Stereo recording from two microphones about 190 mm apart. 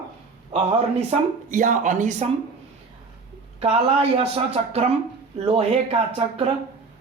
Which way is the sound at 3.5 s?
30° right (ahead or behind).